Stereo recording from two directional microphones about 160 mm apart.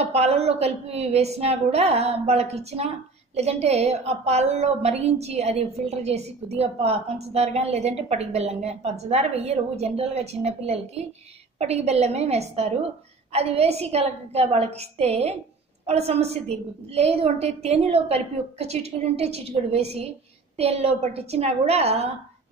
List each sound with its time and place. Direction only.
0.0 s a woman's voice: 40° right (ahead or behind)